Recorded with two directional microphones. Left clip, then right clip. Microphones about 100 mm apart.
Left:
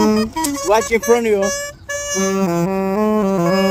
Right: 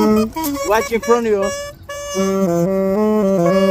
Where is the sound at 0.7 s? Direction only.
75° left (ahead or behind).